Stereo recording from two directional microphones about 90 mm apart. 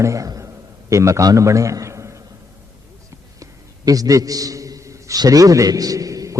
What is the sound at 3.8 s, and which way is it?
A man's voice, 40° right (ahead or behind).